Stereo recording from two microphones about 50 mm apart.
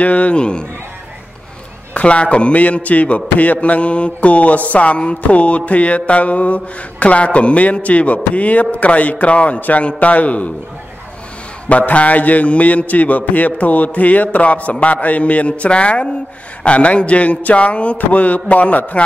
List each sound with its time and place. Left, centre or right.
0.0 s mantra: left
2.0 s mantra: left
11.7 s mantra: left